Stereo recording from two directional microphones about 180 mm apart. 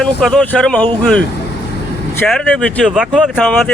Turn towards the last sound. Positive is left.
turn(degrees=-5)  # may be behind; listen again after turning